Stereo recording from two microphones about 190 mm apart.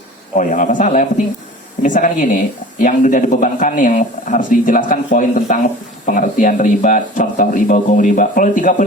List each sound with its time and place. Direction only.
0.3 s speech: 40° left (ahead or behind)